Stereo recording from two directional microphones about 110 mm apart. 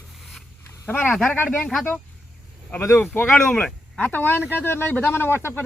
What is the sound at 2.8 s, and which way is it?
Speech, 20° left (ahead or behind).